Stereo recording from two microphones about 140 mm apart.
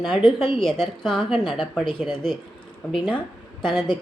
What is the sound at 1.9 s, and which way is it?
Speech, 35° left (ahead or behind).